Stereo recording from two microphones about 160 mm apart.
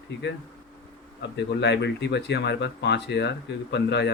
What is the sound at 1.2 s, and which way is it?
Speech, 90° left.